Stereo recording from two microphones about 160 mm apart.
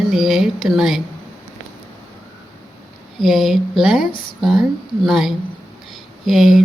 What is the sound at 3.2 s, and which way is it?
Speech, centre (ahead or behind).